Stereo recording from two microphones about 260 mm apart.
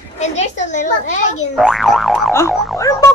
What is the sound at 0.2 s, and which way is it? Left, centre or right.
Speech, left.